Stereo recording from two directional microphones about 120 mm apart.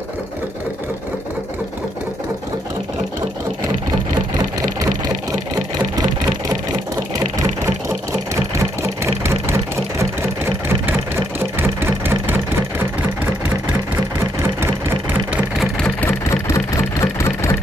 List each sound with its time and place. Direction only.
7.6 s engine: 25° right (ahead or behind)
15.3 s vehicle: centre (ahead or behind)
16.0 s vehicle: 20° left (ahead or behind)